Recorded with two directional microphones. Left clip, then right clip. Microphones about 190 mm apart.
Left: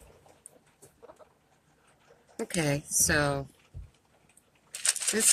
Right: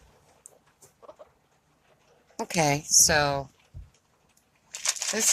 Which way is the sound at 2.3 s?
45° right (ahead or behind).